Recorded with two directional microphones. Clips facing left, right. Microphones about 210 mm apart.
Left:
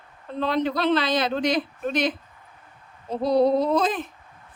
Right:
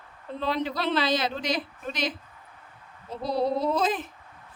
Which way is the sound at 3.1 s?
60° left (ahead or behind).